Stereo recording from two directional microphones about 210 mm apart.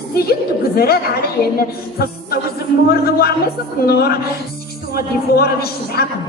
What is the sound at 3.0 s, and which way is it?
Speech, 45° left (ahead or behind).